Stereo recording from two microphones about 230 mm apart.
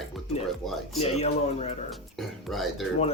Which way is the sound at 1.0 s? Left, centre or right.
Left.